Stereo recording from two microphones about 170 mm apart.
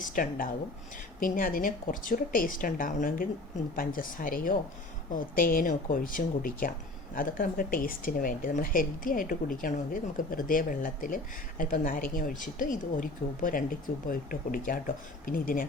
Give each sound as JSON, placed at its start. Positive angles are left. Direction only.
{"t": 0.0, "sound": "a woman's voice", "side_deg": 55}